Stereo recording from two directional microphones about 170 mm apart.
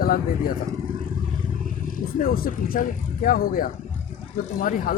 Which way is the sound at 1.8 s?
60° left (ahead or behind).